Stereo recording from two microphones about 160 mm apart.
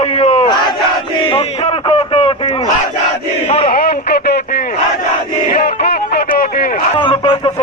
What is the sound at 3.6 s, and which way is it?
Radio, 65° left (ahead or behind).